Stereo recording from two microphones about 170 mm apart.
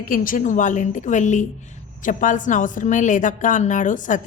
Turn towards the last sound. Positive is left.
turn(degrees=50)  # may be behind; listen again after turning